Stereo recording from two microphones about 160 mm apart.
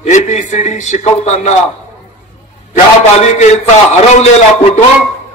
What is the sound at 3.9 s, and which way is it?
Speech, 45° left (ahead or behind).